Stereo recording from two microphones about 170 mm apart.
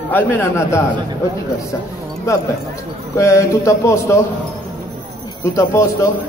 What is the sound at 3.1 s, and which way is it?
A man's voice, 15° left (ahead or behind).